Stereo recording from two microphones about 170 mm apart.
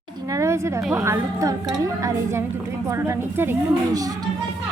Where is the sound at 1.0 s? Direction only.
20° right (ahead or behind).